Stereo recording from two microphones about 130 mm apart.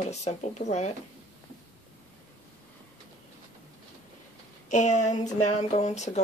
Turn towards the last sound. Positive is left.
turn(degrees=65)  # may be behind; listen again after turning